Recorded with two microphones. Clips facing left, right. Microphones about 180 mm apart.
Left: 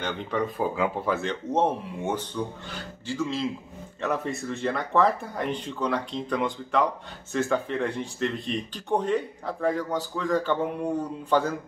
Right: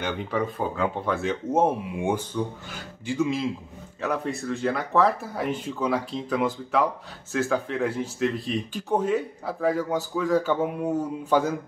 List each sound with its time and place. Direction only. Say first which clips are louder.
0.0 s speech: right 1 dB; 5° right (ahead or behind)
1.3 s speech: right 5 dB; 10° right (ahead or behind)
4.0 s speech: right 1 dB; centre (ahead or behind)